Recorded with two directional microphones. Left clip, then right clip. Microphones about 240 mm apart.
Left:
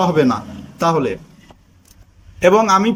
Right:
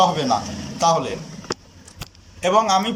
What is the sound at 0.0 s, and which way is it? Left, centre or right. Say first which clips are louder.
A man's voice: left 2 dB; left.